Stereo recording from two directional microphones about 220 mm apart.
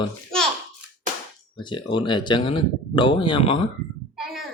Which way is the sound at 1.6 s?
20° left (ahead or behind).